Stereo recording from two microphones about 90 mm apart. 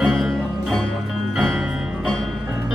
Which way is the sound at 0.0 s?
Centre (ahead or behind).